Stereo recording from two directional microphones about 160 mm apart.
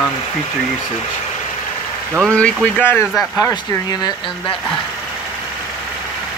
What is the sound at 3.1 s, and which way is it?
Speech, centre (ahead or behind).